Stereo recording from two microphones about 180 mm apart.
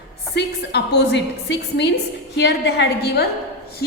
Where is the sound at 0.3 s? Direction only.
65° left (ahead or behind).